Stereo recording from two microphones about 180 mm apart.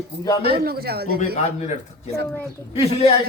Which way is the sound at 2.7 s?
35° left (ahead or behind).